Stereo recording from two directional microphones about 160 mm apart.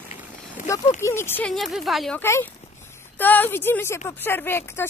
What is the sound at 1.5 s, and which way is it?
Speech, centre (ahead or behind).